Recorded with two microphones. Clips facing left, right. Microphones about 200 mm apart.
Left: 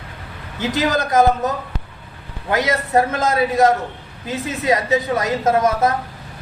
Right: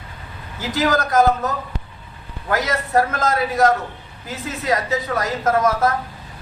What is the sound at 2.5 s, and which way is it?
A woman's voice, 20° left (ahead or behind).